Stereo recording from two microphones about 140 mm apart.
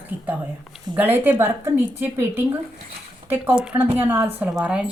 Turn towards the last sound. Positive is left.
turn(degrees=-5)  # may be behind; listen again after turning